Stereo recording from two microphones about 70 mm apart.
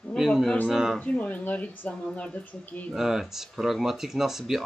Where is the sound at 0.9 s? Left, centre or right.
Centre.